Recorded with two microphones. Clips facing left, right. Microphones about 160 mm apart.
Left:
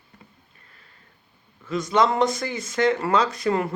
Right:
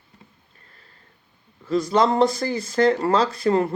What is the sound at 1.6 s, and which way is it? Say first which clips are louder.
Speech: right 2 dB; 35° right (ahead or behind).